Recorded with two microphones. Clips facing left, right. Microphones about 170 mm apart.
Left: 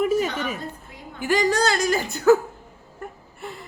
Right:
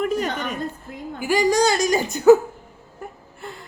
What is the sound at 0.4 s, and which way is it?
Speech, 5° left (ahead or behind).